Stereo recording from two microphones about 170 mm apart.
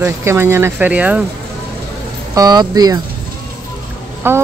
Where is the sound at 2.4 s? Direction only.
25° right (ahead or behind).